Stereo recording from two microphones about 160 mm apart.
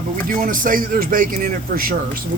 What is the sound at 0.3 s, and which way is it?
Speech, 60° right (ahead or behind).